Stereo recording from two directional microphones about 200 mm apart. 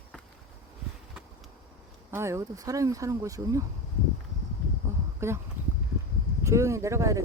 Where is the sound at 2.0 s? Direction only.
15° right (ahead or behind).